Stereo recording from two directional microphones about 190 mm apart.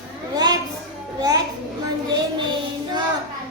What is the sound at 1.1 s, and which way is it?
Speech, 20° right (ahead or behind).